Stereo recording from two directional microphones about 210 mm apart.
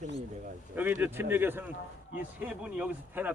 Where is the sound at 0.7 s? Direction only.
10° right (ahead or behind).